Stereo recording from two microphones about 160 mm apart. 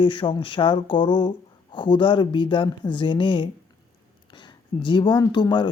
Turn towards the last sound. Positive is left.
turn(degrees=30)  # may be behind; listen again after turning